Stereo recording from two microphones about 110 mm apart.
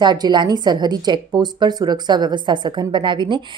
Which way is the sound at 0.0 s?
40° right (ahead or behind).